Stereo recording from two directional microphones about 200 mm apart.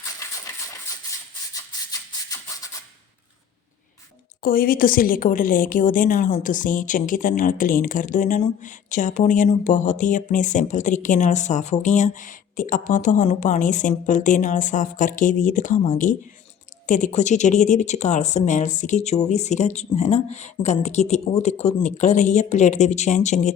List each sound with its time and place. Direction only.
0.2 s a sound: 15° left (ahead or behind)
1.9 s music: 15° left (ahead or behind)
4.4 s a woman's voice: 45° left (ahead or behind)